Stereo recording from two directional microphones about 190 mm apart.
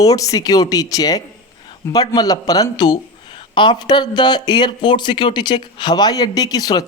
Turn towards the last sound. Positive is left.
turn(degrees=20)  # may be behind; listen again after turning